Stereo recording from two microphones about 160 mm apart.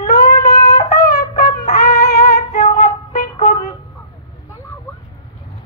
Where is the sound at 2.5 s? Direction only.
50° left (ahead or behind).